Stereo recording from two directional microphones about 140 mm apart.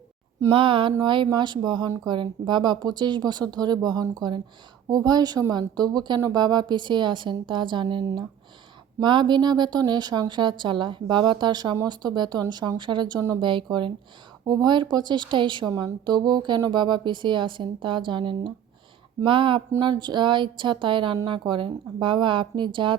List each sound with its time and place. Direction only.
0.5 s speech: 40° right (ahead or behind)